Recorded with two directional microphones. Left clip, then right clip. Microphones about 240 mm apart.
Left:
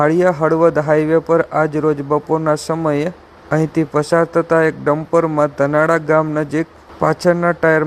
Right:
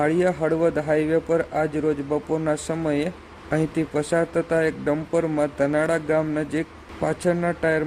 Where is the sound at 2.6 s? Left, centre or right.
Centre.